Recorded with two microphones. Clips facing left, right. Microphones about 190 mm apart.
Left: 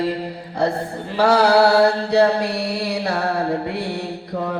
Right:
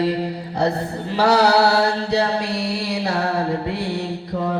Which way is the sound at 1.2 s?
50° left (ahead or behind).